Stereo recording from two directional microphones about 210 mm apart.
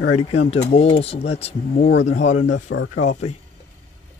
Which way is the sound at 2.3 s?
65° left (ahead or behind).